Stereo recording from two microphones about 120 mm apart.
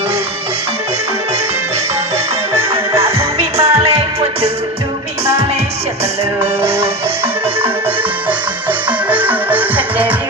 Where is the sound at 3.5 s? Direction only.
55° right (ahead or behind).